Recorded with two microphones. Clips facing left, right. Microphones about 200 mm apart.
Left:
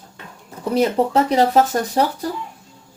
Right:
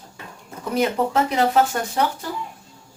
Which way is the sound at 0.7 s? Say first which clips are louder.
Left 3 dB; 35° left (ahead or behind).